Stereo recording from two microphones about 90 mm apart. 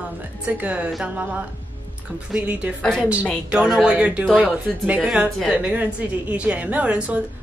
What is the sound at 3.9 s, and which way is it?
A woman's voice, 15° right (ahead or behind).